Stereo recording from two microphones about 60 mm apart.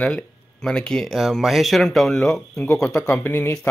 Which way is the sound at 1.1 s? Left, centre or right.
Centre.